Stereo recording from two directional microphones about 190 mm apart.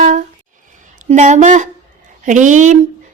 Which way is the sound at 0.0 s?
40° right (ahead or behind).